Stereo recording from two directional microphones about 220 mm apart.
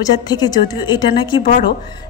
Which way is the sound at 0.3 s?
20° left (ahead or behind).